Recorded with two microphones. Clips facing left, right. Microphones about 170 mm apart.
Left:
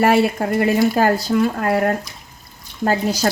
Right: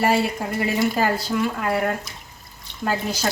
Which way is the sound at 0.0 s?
55° left (ahead or behind).